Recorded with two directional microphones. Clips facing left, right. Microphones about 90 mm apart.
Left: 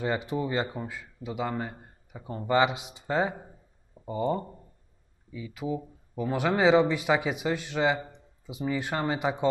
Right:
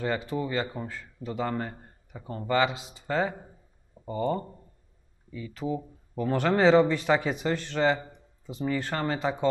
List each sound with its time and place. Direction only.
0.0 s speech: 20° left (ahead or behind)
0.7 s speech: 10° left (ahead or behind)